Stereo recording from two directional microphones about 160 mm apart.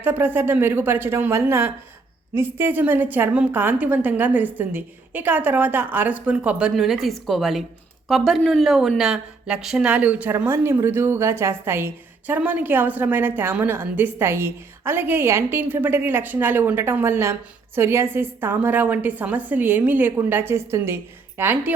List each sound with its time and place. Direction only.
0.0 s speech: 10° right (ahead or behind)